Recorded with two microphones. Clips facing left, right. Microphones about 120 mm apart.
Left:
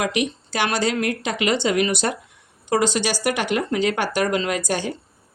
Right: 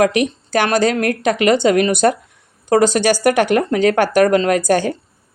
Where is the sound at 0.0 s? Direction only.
50° right (ahead or behind).